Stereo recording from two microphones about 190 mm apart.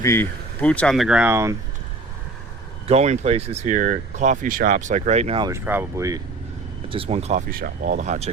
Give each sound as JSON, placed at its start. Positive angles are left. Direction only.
{"t": 0.0, "sound": "speech", "side_deg": 15}
{"t": 2.8, "sound": "speech", "side_deg": -35}
{"t": 5.5, "sound": "speech", "side_deg": -10}
{"t": 6.9, "sound": "speech", "side_deg": -30}
{"t": 7.5, "sound": "speech", "side_deg": -45}